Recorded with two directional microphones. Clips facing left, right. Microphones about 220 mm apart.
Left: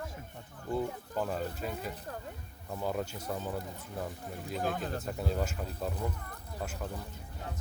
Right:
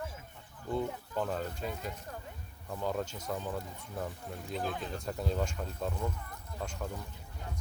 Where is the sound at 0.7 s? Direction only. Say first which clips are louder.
Even; 5° left (ahead or behind).